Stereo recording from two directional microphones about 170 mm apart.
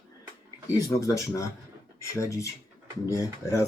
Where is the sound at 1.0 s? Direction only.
20° left (ahead or behind).